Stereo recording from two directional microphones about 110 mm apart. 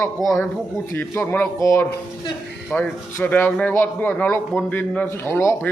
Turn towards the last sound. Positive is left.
turn(degrees=25)  # may be behind; listen again after turning